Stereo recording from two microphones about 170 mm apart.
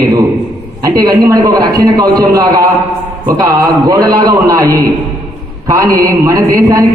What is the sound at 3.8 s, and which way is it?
A man's voice, 25° right (ahead or behind).